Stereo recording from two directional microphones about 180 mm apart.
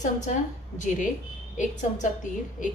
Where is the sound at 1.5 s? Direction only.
45° left (ahead or behind).